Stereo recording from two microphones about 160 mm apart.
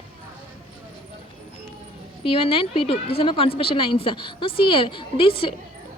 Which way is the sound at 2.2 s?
35° left (ahead or behind).